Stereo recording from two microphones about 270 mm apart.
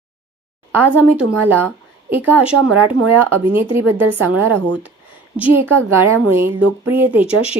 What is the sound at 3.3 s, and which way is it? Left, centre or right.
Speech, right.